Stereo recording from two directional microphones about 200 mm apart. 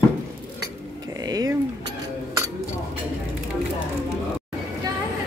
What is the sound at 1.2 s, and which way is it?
Speech, 20° right (ahead or behind).